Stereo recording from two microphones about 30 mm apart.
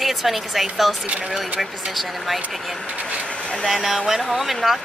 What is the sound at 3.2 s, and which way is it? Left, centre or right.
Vehicle, left.